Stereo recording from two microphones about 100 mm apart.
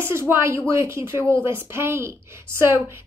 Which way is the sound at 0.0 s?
25° right (ahead or behind).